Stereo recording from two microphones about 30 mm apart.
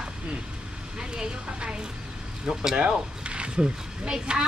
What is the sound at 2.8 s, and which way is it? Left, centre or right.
Speech, right.